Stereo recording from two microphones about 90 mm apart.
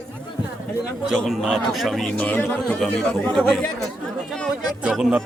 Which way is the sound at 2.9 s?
10° left (ahead or behind).